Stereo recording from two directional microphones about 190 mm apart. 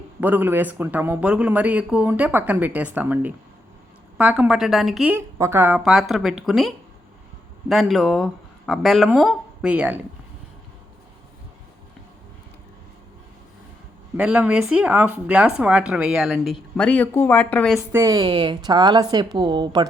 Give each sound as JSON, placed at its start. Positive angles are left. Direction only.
{"t": 0.2, "sound": "speech", "side_deg": -10}
{"t": 5.1, "sound": "speech", "side_deg": -15}
{"t": 14.2, "sound": "speech", "side_deg": -5}
{"t": 17.7, "sound": "a woman's voice", "side_deg": -15}